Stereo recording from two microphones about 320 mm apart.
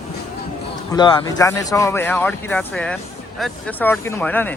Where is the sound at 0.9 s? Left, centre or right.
Centre.